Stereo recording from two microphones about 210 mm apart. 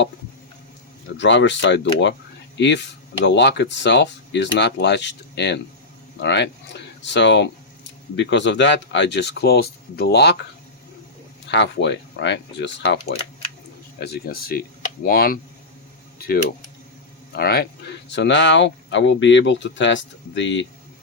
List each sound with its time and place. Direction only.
1.1 s speech: 60° left (ahead or behind)
11.4 s speech: 55° left (ahead or behind)
17.3 s speech: 50° left (ahead or behind)